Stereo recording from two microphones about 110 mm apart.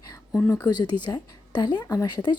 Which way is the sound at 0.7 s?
40° left (ahead or behind).